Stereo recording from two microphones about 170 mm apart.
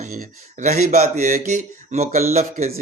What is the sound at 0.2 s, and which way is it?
Speech, 45° right (ahead or behind).